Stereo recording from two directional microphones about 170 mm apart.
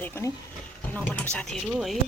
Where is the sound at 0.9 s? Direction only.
5° left (ahead or behind).